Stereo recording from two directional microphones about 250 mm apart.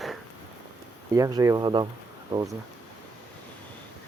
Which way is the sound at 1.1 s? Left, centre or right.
Centre.